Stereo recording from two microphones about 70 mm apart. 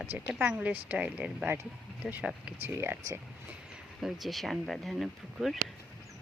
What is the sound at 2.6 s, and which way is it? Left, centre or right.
Speech, right.